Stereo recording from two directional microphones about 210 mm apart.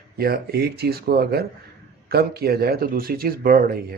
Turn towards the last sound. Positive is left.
turn(degrees=-45)  # may be behind; listen again after turning